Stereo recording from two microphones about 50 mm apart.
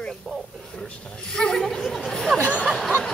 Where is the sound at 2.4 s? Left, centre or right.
Left.